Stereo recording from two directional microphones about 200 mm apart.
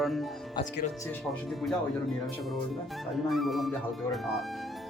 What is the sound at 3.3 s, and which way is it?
A man's voice, centre (ahead or behind).